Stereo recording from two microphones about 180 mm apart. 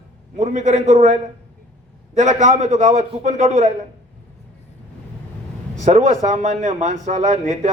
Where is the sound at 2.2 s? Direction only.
40° right (ahead or behind).